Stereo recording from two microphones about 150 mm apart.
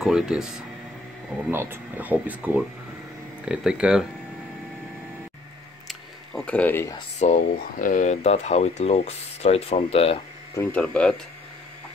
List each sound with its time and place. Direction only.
0.0 s speech: 5° right (ahead or behind)
1.5 s speech: 15° right (ahead or behind)
5.9 s camera: 5° left (ahead or behind)
7.2 s speech: 50° left (ahead or behind)
7.5 s speech: 65° left (ahead or behind); by 10.2 s 40° left (ahead or behind)
10.5 s speech: 10° left (ahead or behind)